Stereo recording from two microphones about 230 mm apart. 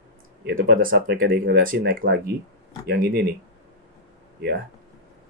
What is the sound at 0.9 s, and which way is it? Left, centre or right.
Speech, right.